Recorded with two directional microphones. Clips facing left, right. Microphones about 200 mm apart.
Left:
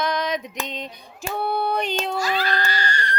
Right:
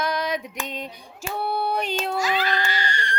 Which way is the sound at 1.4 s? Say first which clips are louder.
Left 2 dB; 5° right (ahead or behind).